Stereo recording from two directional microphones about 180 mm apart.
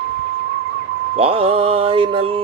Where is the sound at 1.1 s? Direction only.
30° right (ahead or behind).